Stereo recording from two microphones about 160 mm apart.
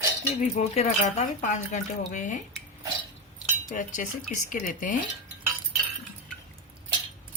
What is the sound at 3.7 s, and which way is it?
Speech, 55° left (ahead or behind).